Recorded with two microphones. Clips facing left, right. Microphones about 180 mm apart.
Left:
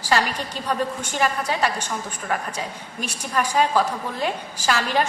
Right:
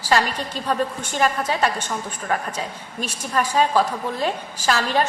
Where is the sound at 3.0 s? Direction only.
10° left (ahead or behind).